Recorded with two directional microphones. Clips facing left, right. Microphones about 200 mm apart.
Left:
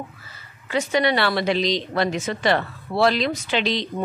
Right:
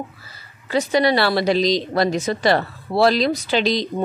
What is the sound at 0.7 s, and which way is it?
A woman's voice, 35° right (ahead or behind).